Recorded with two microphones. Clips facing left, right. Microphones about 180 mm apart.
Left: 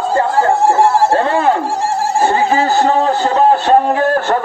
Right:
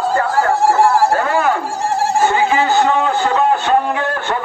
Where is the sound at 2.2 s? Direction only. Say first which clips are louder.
Left 3 dB; 35° left (ahead or behind).